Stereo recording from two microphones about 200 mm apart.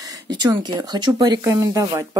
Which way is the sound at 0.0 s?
20° right (ahead or behind).